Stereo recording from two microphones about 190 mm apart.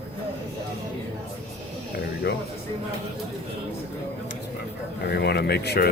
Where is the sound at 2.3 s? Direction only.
55° left (ahead or behind).